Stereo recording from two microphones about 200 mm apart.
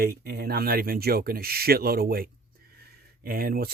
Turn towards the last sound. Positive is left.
turn(degrees=-50)  # may be behind; listen again after turning